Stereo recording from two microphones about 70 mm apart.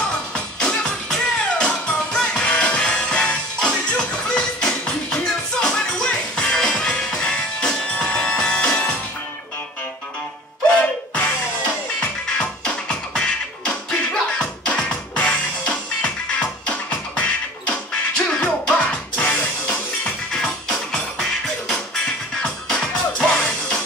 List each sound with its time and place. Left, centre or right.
0.6 s music: centre
10.8 s music: centre